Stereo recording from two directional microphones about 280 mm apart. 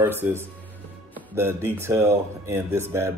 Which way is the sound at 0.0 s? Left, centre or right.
Centre.